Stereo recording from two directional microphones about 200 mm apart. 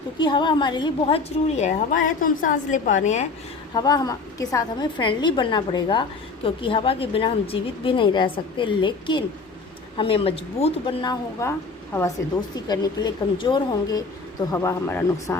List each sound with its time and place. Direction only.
0.2 s a woman's voice: 25° left (ahead or behind)
3.8 s a woman's voice: 20° left (ahead or behind)